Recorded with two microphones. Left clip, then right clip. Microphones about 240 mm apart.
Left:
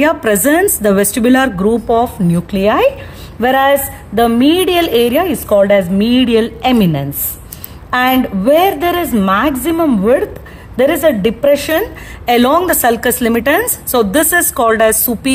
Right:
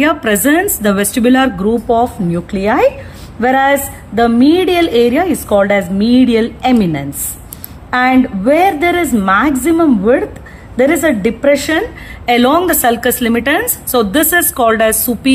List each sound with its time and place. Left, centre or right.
0.0 s a woman's voice: left